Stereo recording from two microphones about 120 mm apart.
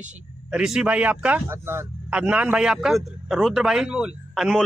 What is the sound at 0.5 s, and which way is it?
Speech, 5° right (ahead or behind).